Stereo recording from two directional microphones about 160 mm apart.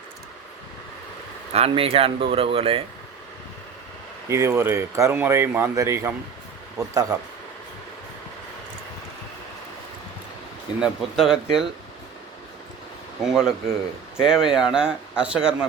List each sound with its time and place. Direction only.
1.5 s speech: 40° right (ahead or behind)
4.3 s speech: 15° right (ahead or behind)
10.8 s speech: 5° right (ahead or behind)
13.2 s speech: 5° right (ahead or behind)